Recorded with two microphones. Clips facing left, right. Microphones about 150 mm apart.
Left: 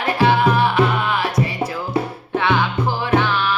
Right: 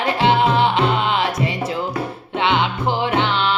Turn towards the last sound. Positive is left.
turn(degrees=-25)  # may be behind; listen again after turning